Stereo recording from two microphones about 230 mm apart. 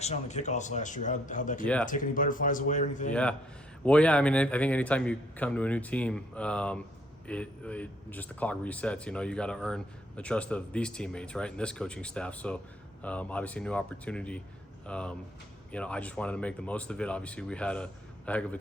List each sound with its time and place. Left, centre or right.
0.0 s speech: left
1.6 s a man's voice: centre
1.9 s speech: left
3.1 s a man's voice: centre